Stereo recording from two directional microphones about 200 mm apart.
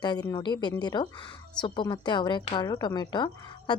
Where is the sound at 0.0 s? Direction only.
20° left (ahead or behind).